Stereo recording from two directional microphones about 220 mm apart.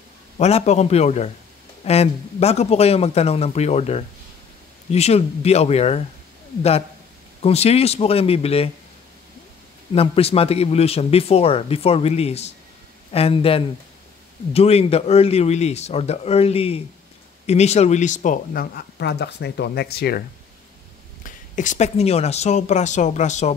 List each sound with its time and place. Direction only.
0.4 s a man's voice: 30° left (ahead or behind)
7.4 s a man's voice: 30° left (ahead or behind)
9.9 s a man's voice: 25° left (ahead or behind); by 20.2 s 45° left (ahead or behind)
21.2 s speech: 35° left (ahead or behind)